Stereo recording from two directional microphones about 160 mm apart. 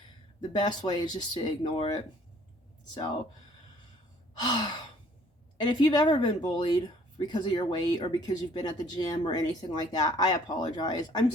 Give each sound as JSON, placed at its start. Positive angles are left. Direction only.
{"t": 0.5, "sound": "speech", "side_deg": 25}
{"t": 4.4, "sound": "speech", "side_deg": 25}